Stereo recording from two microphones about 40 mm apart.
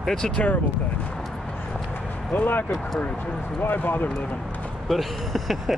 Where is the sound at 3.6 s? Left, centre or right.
Left.